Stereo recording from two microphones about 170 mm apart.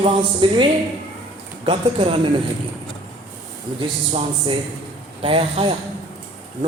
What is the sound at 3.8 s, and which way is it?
A man's voice, 30° right (ahead or behind).